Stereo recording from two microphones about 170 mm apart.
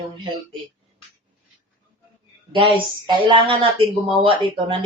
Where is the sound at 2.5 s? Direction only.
30° right (ahead or behind).